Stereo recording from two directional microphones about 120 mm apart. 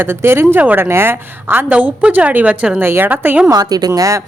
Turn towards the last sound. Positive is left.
turn(degrees=-25)  # may be behind; listen again after turning